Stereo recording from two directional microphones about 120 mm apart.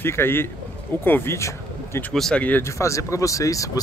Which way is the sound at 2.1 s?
5° left (ahead or behind).